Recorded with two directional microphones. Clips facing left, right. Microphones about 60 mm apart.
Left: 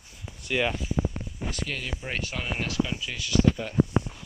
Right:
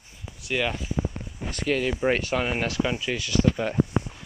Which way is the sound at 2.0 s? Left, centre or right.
Right.